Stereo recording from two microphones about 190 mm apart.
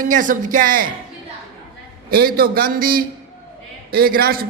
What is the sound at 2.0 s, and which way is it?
A man's voice, 50° right (ahead or behind).